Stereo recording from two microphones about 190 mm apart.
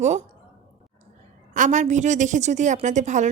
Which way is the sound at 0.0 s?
35° right (ahead or behind).